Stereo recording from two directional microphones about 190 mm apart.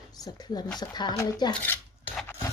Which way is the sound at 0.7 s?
20° left (ahead or behind).